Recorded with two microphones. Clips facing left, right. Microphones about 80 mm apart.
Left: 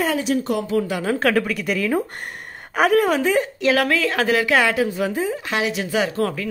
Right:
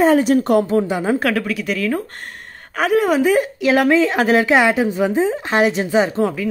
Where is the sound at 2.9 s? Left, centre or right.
Centre.